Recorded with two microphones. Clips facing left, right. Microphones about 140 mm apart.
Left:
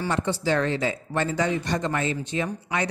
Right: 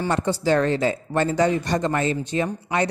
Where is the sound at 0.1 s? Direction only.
40° right (ahead or behind).